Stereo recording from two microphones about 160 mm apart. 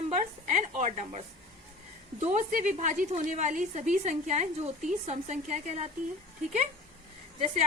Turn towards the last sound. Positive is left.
turn(degrees=-45)  # may be behind; listen again after turning